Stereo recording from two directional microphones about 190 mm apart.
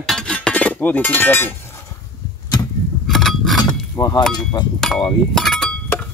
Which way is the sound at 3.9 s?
15° left (ahead or behind).